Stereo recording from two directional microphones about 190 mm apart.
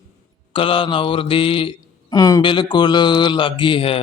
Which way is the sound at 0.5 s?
30° left (ahead or behind).